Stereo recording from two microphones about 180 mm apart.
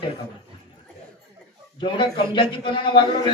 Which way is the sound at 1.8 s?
25° left (ahead or behind).